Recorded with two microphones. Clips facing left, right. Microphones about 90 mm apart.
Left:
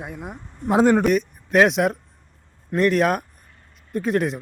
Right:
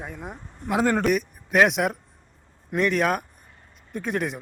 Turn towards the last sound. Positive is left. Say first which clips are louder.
# left 6 dB
turn(degrees=0)  # may be behind; listen again after turning